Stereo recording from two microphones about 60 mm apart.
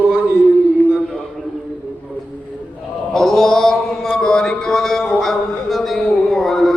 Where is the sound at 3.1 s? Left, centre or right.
Centre.